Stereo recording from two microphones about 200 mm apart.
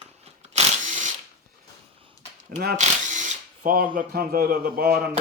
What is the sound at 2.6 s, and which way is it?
Speech, 45° right (ahead or behind).